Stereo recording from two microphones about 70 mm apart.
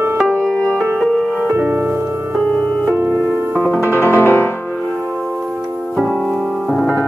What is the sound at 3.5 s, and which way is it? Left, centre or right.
Music, left.